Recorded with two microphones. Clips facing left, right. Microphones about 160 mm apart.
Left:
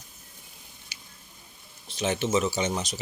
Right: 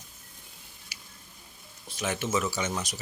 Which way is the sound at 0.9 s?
25° left (ahead or behind).